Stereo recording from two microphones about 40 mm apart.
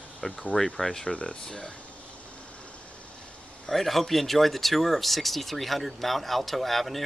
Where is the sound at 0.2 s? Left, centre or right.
Centre.